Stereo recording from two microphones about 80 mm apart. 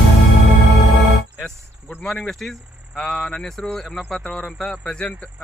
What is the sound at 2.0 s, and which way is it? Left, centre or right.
Speech, centre.